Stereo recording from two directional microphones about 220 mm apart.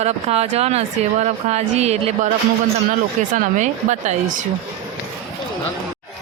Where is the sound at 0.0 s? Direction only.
30° right (ahead or behind).